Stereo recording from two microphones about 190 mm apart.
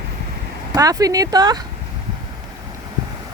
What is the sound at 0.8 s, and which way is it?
Speech, 20° right (ahead or behind).